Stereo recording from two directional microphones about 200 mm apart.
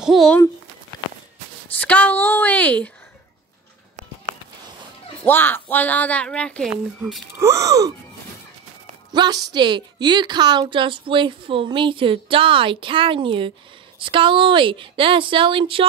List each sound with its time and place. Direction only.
0.0 s speech: centre (ahead or behind)
1.8 s speech: 5° left (ahead or behind)
5.2 s speech: 10° left (ahead or behind)
7.3 s speech: 15° right (ahead or behind)
9.1 s a woman's voice: 20° right (ahead or behind)